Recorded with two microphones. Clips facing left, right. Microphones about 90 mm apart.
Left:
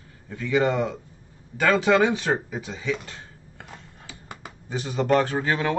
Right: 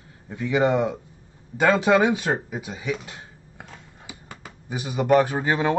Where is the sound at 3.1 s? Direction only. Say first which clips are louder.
Right 1 dB; 10° right (ahead or behind).